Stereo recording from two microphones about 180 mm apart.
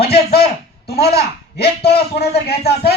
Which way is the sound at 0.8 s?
65° left (ahead or behind).